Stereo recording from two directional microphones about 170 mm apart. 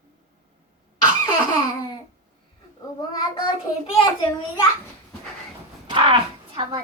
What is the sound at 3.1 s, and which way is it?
Child singing, 25° left (ahead or behind).